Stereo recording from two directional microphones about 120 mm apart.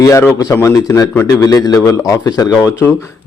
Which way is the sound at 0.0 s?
25° left (ahead or behind).